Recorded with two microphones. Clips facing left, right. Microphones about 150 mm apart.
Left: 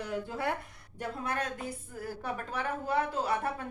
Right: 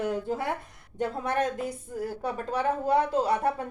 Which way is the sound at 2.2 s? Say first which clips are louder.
Right 7 dB; 40° right (ahead or behind).